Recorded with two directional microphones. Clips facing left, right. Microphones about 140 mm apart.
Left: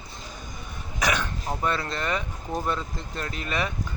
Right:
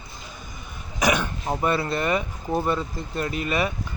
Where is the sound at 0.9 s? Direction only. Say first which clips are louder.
Right 4 dB; 15° right (ahead or behind).